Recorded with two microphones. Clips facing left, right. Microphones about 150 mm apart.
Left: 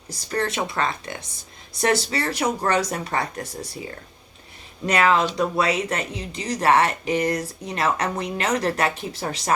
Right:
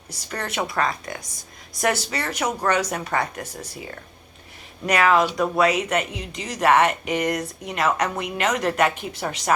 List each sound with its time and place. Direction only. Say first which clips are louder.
0.1 s speech: left 5 dB; 30° left (ahead or behind)
4.9 s speech: right 1 dB; 30° left (ahead or behind)